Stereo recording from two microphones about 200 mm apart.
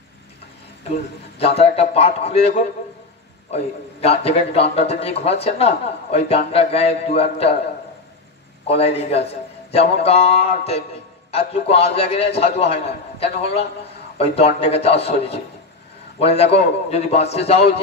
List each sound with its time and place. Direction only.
1.6 s a man's voice: 30° left (ahead or behind)
8.6 s a man's voice: 30° left (ahead or behind)